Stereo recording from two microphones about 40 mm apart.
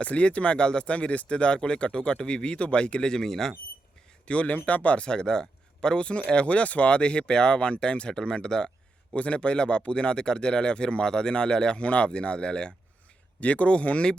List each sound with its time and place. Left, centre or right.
0.0 s speech: left; by 3.5 s centre
4.3 s speech: left
5.0 s speech: left
9.1 s speech: left